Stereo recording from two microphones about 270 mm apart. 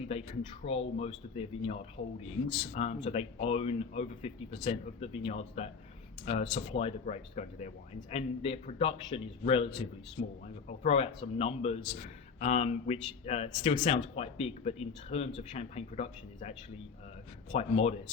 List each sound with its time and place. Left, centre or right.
0.1 s a man's voice: left